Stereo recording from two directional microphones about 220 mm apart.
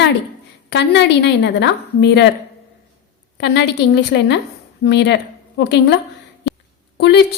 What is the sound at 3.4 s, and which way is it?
A woman's voice, 50° left (ahead or behind).